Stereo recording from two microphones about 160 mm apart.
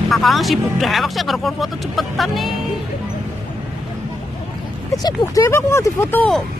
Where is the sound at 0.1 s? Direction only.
Centre (ahead or behind).